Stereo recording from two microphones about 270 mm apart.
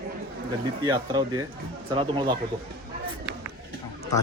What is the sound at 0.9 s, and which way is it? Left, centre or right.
Speech, centre.